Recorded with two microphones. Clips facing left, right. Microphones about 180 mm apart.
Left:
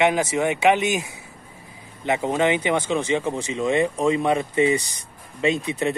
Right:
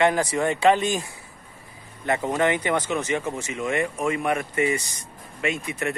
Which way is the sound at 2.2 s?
25° left (ahead or behind).